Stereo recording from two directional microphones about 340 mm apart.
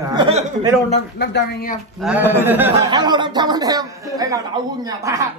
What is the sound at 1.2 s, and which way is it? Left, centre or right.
Speech, left.